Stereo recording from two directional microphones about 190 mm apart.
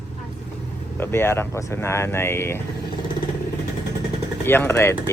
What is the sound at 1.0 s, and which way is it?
Speech, 10° left (ahead or behind).